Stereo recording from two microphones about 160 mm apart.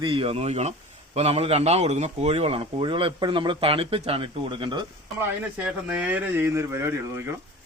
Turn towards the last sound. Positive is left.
turn(degrees=-15)  # may be behind; listen again after turning